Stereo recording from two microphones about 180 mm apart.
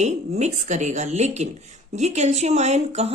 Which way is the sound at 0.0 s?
40° right (ahead or behind).